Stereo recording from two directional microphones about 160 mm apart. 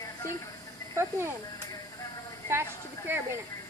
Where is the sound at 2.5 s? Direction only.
15° right (ahead or behind).